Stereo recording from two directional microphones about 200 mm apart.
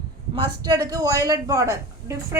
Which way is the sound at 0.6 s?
20° right (ahead or behind).